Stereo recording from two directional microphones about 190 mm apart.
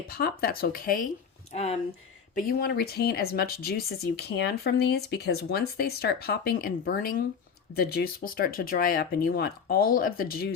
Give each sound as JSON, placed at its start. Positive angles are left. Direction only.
{"t": 0.1, "sound": "speech", "side_deg": 55}
{"t": 2.3, "sound": "speech", "side_deg": 45}